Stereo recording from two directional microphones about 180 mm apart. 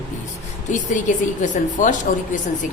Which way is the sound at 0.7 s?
45° left (ahead or behind).